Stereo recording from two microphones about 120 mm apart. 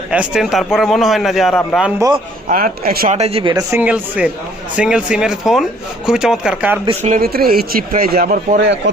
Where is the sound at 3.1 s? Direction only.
60° right (ahead or behind).